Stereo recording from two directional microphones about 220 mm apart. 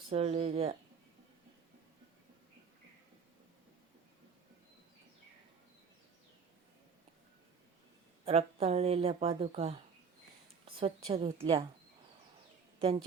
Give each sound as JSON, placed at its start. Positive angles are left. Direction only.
{"t": 0.1, "sound": "speech", "side_deg": -25}
{"t": 8.2, "sound": "speech", "side_deg": -25}
{"t": 10.8, "sound": "speech", "side_deg": -25}